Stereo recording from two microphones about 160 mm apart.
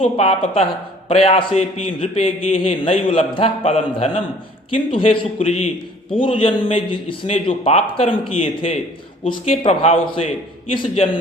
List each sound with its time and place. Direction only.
0.0 s a man's voice: 40° left (ahead or behind)